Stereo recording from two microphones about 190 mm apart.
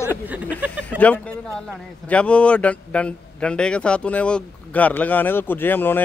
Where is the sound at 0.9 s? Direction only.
5° left (ahead or behind).